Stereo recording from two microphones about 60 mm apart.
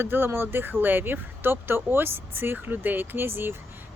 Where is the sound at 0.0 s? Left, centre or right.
Right.